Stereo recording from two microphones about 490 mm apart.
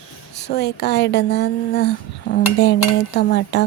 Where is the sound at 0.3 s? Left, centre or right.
Centre.